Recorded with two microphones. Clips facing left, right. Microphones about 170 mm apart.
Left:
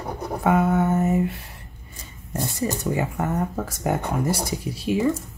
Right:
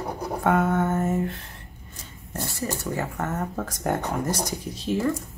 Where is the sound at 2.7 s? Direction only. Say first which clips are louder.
Left 4 dB; 15° left (ahead or behind).